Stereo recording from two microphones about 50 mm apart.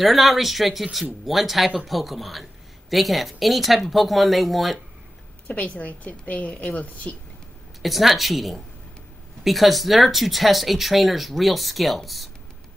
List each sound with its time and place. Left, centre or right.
0.0 s speech: centre
5.5 s a woman's voice: left
7.8 s speech: centre